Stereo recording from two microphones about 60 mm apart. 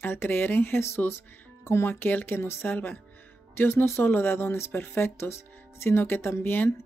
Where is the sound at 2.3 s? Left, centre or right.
Left.